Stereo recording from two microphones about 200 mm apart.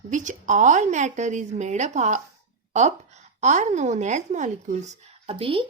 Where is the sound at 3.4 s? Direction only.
35° right (ahead or behind).